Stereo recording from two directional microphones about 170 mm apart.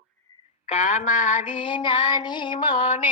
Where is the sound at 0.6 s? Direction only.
45° left (ahead or behind).